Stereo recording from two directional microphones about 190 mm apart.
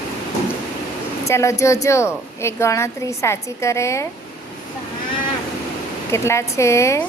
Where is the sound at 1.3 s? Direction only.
15° left (ahead or behind).